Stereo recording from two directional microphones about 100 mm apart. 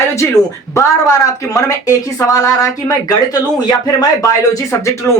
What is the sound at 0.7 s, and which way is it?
Speech, 35° left (ahead or behind).